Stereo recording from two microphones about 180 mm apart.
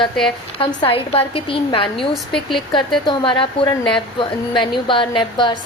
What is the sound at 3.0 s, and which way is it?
A woman's voice, 25° left (ahead or behind).